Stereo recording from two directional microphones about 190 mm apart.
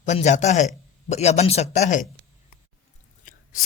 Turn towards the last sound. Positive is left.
turn(degrees=45)  # may be behind; listen again after turning